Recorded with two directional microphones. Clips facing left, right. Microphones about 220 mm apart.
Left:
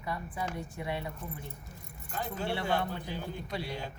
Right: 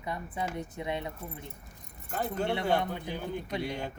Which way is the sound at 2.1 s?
50° right (ahead or behind).